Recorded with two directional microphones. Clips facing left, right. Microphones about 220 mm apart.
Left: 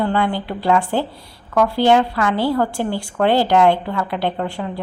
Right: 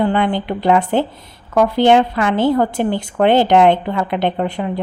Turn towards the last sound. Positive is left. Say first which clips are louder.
# right 4 dB
turn(degrees=-20)  # may be behind; listen again after turning